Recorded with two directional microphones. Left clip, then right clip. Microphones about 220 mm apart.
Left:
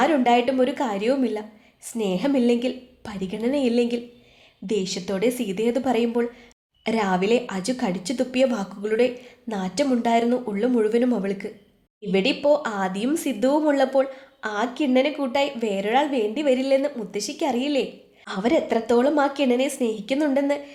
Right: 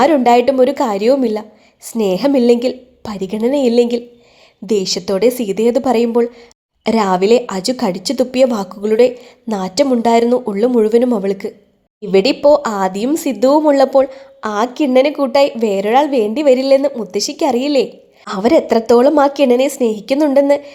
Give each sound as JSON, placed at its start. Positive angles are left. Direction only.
{"t": 0.0, "sound": "a woman's voice", "side_deg": -30}